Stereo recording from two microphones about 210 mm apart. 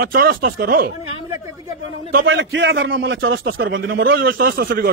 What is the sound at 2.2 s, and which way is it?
Speech, 60° right (ahead or behind).